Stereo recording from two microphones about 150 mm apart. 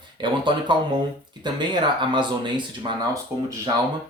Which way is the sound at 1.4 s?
30° right (ahead or behind).